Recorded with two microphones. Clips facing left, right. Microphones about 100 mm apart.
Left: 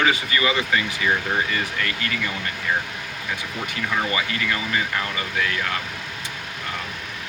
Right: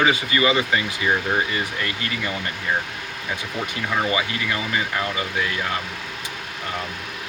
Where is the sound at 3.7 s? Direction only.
15° right (ahead or behind).